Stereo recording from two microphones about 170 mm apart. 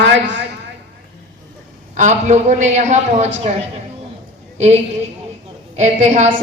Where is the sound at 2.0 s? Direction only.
45° right (ahead or behind).